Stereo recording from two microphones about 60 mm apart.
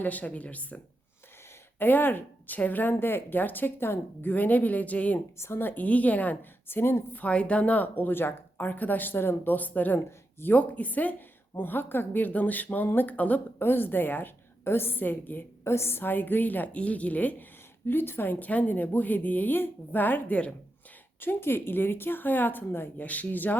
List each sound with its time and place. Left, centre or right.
0.0 s a woman's voice: left
1.8 s speech: left
5.4 s a woman's voice: left
15.6 s speech: left
17.8 s speech: left
21.2 s speech: left